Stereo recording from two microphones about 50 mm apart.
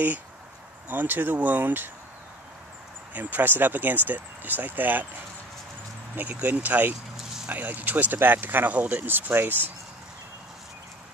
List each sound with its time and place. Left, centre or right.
0.8 s speech: right
3.1 s speech: right
6.1 s speech: right
8.7 s speech: right
9.0 s speech: right